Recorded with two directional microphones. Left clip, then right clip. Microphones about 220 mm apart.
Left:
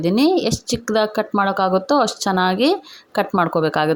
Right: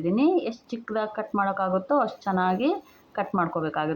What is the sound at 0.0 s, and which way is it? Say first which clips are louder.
A woman's voice: left 6 dB; 50° left (ahead or behind).